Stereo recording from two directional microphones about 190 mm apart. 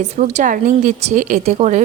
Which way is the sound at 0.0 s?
40° right (ahead or behind).